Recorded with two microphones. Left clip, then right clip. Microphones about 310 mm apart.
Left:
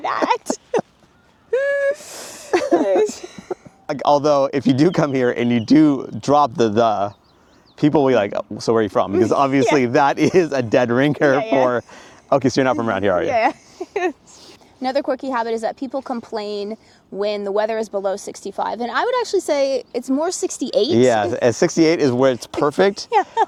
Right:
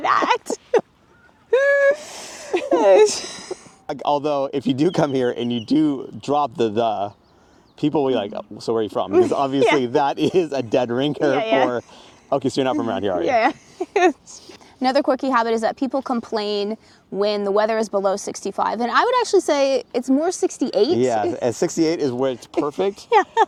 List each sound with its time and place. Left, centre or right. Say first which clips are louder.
0.0 s speech: right 1 dB; centre
0.5 s a sound: right 2 dB; centre; by 2.5 s right
2.5 s a sound: left 3 dB; left
2.8 s a sound: right 5 dB; right
3.8 s speech: left 5 dB; left
11.3 s speech: left 1 dB; centre
12.3 s speech: left 4 dB; left
13.2 s speech: even; centre
13.7 s a sound: right 5 dB; right
14.8 s speech: right 2 dB; right; by 20.9 s centre
20.9 s speech: left 4 dB; left
23.0 s speech: right 1 dB; right